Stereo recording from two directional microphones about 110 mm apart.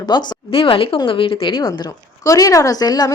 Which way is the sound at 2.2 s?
30° left (ahead or behind).